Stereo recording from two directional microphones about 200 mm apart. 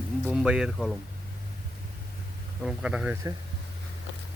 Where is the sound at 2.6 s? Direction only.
5° right (ahead or behind).